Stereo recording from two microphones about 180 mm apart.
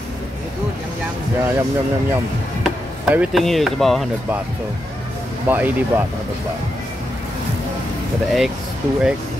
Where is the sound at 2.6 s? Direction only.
5° right (ahead or behind).